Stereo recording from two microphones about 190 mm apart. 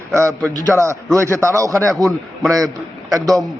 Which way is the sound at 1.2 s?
15° right (ahead or behind).